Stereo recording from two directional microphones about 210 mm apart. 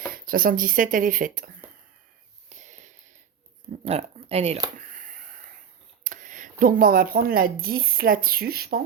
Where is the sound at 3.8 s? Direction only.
30° right (ahead or behind).